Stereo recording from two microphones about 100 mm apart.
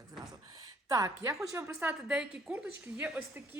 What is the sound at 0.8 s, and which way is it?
Speech, 35° right (ahead or behind).